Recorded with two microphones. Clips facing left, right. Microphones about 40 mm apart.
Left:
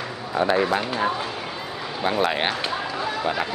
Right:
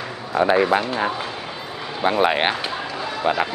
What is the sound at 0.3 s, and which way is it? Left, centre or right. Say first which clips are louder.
Speech: right 4 dB; centre.